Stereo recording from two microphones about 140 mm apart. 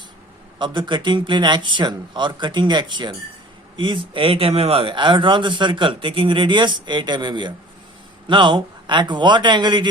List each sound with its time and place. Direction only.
0.6 s speech: 35° right (ahead or behind)